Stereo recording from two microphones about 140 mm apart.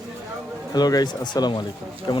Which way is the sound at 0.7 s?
30° left (ahead or behind).